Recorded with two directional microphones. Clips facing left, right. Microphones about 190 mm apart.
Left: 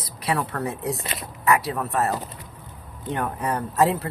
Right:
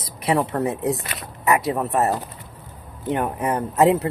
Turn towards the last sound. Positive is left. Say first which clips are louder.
# right 4 dB
turn(degrees=-20)  # may be behind; listen again after turning